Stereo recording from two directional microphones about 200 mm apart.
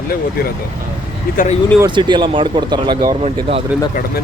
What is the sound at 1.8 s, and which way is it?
Speech, 20° right (ahead or behind).